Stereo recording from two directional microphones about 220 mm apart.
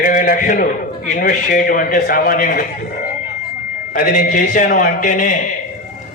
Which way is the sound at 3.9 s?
35° left (ahead or behind).